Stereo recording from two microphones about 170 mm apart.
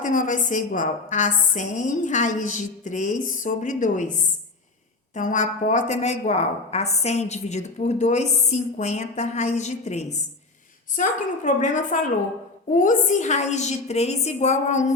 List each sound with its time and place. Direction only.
0.0 s a woman's voice: 50° left (ahead or behind)